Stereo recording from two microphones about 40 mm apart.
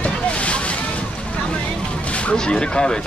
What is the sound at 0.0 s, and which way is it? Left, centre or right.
Boat, left.